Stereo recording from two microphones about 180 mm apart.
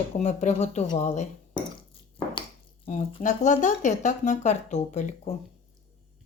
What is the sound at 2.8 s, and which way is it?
Speech, 40° left (ahead or behind).